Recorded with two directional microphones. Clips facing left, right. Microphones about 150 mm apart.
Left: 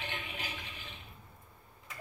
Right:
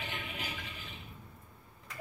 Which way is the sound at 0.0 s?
Centre (ahead or behind).